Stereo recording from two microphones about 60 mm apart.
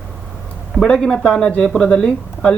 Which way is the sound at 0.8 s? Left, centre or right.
Centre.